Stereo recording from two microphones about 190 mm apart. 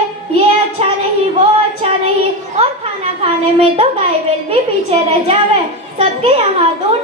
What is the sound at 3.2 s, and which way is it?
A woman's voice, 30° right (ahead or behind).